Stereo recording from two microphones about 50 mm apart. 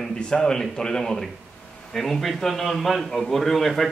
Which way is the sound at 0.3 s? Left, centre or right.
Centre.